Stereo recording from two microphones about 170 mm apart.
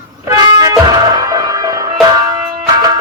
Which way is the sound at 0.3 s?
20° right (ahead or behind).